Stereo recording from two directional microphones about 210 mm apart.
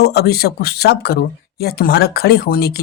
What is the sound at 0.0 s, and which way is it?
Speech, 50° left (ahead or behind).